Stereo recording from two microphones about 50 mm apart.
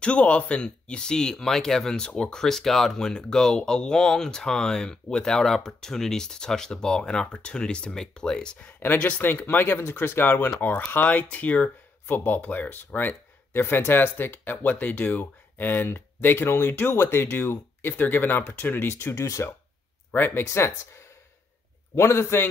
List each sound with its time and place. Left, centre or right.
0.0 s speech: left
9.5 s speech: left
13.5 s speech: left
18.9 s speech: left
20.2 s speech: left
20.4 s speech: left